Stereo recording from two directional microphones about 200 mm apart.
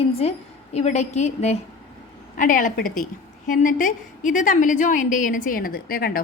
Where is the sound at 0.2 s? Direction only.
30° left (ahead or behind).